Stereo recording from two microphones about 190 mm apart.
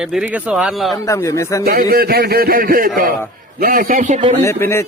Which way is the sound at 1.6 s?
50° right (ahead or behind).